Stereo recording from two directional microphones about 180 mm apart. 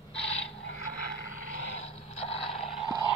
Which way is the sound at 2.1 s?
35° left (ahead or behind).